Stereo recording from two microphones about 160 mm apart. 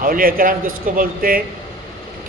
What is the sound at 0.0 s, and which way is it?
A man's voice, 60° right (ahead or behind).